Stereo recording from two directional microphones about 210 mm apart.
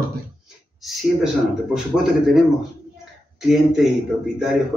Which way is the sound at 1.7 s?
Centre (ahead or behind).